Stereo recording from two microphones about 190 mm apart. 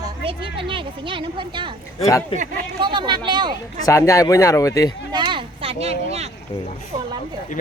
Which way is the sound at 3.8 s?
15° left (ahead or behind).